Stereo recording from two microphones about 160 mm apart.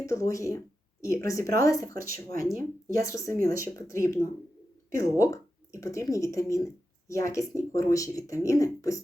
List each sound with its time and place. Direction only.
0.0 s speech: 20° left (ahead or behind)